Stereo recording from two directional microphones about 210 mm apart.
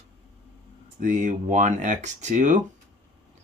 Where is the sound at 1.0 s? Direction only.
35° right (ahead or behind).